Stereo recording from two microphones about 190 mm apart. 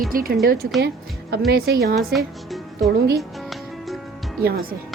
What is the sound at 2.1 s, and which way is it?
Music, centre (ahead or behind).